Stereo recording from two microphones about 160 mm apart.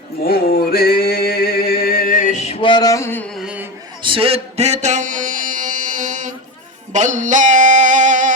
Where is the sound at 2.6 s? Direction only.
25° left (ahead or behind).